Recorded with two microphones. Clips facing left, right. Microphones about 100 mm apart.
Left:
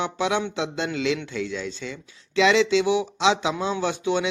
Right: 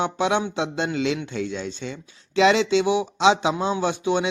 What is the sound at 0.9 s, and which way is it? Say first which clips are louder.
Speech: right 1 dB; 30° right (ahead or behind).